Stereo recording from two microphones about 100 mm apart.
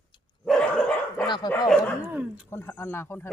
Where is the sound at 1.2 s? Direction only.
45° left (ahead or behind).